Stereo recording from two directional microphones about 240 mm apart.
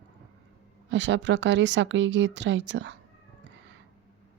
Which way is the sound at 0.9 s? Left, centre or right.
Right.